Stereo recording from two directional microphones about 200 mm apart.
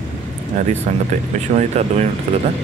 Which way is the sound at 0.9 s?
35° right (ahead or behind).